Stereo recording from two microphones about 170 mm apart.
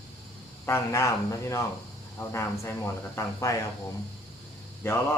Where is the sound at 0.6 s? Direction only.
15° left (ahead or behind).